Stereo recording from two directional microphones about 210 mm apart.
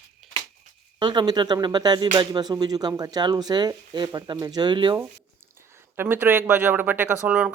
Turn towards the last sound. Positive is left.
turn(degrees=-5)  # may be behind; listen again after turning